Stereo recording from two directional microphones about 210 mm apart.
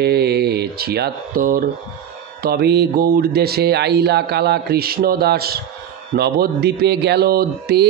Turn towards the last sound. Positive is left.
turn(degrees=-50)  # may be behind; listen again after turning